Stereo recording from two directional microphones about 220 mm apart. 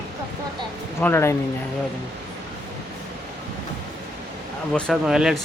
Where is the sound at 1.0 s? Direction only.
10° left (ahead or behind).